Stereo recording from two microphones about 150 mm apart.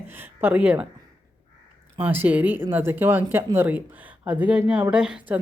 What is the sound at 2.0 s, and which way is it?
Speech, 10° right (ahead or behind).